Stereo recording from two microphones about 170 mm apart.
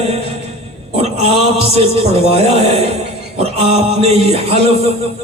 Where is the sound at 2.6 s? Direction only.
35° right (ahead or behind).